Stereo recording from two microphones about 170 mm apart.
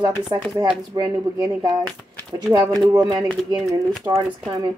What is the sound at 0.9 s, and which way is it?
Speech, 25° right (ahead or behind).